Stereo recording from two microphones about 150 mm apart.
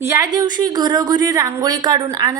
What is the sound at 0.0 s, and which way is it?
Speech, 20° right (ahead or behind).